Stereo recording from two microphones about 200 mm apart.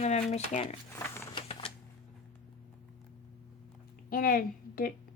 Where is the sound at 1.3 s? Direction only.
30° left (ahead or behind).